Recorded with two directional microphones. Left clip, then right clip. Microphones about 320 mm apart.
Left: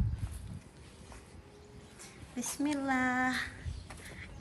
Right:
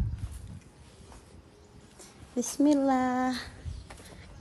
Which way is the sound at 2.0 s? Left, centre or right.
Centre.